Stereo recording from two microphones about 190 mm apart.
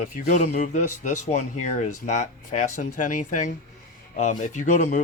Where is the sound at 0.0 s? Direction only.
40° left (ahead or behind).